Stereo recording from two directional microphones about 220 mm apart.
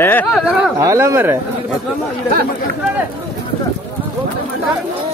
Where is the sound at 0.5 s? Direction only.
5° right (ahead or behind).